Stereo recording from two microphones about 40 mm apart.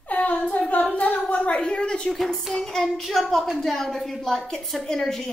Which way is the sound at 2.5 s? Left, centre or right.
Centre.